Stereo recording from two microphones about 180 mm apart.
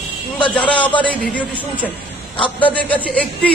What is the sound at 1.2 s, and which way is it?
A man's voice, 10° left (ahead or behind).